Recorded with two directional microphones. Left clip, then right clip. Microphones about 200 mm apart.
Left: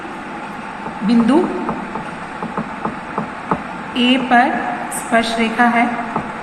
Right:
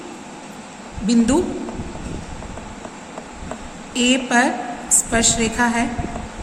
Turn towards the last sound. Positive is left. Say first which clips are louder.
# left 5 dB
turn(degrees=-65)  # may be behind; listen again after turning